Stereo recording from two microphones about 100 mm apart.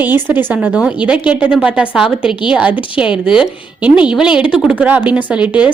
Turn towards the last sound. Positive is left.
turn(degrees=-10)  # may be behind; listen again after turning